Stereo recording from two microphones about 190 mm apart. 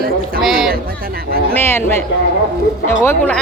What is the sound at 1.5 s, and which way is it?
Speech, 10° left (ahead or behind).